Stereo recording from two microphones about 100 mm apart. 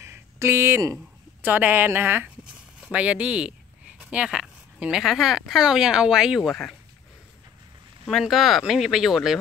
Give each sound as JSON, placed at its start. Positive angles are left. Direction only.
{"t": 0.0, "sound": "a sound", "side_deg": -25}
{"t": 1.4, "sound": "speech", "side_deg": -15}
{"t": 8.1, "sound": "speech", "side_deg": 0}